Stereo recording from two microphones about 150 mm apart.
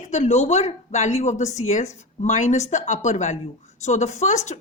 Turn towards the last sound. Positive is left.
turn(degrees=50)  # may be behind; listen again after turning